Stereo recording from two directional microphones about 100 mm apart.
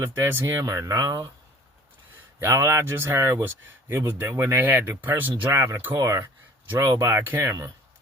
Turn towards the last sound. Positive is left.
turn(degrees=-25)  # may be behind; listen again after turning